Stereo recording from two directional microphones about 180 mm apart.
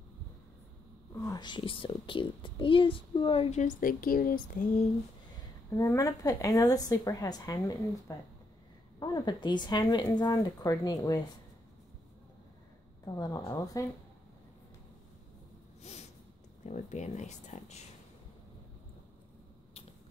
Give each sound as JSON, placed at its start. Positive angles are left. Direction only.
{"t": 1.1, "sound": "a woman's voice", "side_deg": 20}
{"t": 5.8, "sound": "a woman's voice", "side_deg": 15}
{"t": 13.0, "sound": "a woman's voice", "side_deg": 20}
{"t": 15.8, "sound": "snort", "side_deg": 35}
{"t": 16.6, "sound": "speech", "side_deg": 40}